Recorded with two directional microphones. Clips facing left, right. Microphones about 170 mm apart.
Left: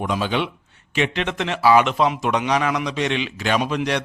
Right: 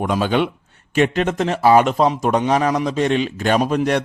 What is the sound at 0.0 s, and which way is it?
A man's voice, 45° right (ahead or behind).